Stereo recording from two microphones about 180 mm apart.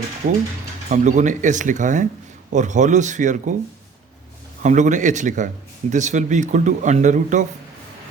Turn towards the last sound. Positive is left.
turn(degrees=-45)  # may be behind; listen again after turning